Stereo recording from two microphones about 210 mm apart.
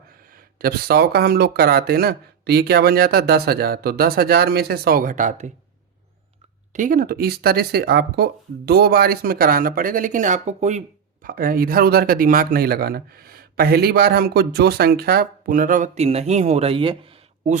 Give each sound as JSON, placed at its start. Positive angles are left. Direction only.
{"t": 0.1, "sound": "speech", "side_deg": -45}
{"t": 6.7, "sound": "speech", "side_deg": -40}